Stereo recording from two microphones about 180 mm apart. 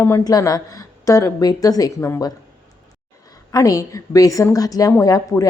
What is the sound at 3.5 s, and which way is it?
A woman's voice, 20° left (ahead or behind).